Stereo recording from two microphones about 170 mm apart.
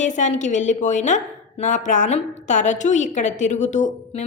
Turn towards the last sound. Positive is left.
turn(degrees=45)  # may be behind; listen again after turning